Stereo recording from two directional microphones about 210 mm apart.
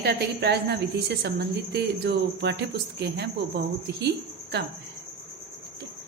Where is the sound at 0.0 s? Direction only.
55° right (ahead or behind).